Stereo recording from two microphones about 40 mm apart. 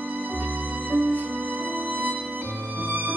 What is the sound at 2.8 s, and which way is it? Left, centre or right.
Music, right.